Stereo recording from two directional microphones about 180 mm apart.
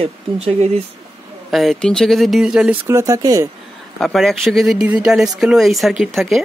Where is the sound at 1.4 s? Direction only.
Centre (ahead or behind).